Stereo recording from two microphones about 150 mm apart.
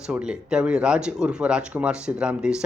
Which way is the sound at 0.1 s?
5° right (ahead or behind).